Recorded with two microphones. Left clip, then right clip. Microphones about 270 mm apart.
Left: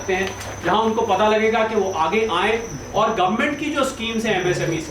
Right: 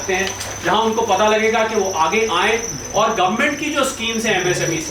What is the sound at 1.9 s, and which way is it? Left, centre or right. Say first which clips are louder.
Cricket: right 3 dB; centre.